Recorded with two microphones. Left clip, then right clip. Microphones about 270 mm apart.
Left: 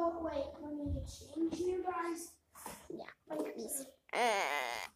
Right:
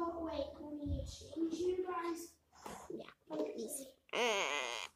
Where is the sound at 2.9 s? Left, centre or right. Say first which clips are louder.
Left 1 dB; centre.